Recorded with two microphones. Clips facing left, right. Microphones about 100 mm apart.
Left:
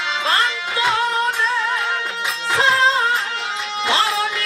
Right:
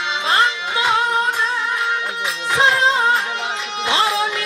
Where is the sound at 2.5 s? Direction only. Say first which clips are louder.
Even; 20° right (ahead or behind).